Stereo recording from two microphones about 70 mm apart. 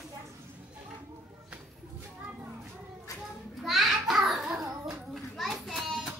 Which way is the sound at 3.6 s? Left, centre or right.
Centre.